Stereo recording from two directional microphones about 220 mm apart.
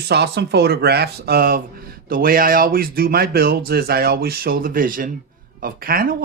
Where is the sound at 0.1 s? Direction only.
50° right (ahead or behind).